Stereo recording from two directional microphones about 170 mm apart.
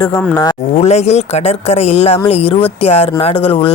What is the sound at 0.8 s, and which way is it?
Speech, 40° left (ahead or behind).